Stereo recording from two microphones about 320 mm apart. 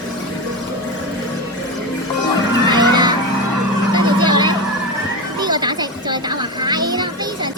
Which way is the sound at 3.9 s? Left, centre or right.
Centre.